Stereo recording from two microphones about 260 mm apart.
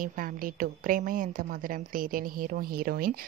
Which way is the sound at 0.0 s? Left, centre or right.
Right.